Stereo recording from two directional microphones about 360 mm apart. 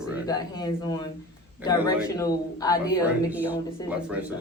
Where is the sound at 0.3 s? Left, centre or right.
Centre.